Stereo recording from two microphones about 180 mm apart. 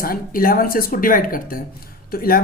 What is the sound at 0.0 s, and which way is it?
Speech, 55° left (ahead or behind).